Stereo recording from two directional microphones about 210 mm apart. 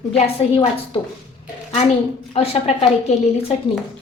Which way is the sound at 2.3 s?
30° left (ahead or behind).